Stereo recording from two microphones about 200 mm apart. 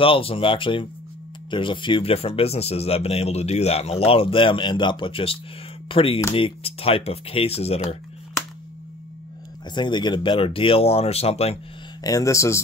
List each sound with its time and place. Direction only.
0.0 s speech: 25° left (ahead or behind)
9.8 s speech: 25° left (ahead or behind)
12.0 s speech: 15° left (ahead or behind)